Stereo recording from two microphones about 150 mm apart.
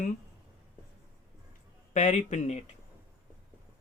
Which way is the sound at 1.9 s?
50° left (ahead or behind).